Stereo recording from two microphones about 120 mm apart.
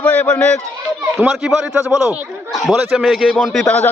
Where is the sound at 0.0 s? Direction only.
10° left (ahead or behind).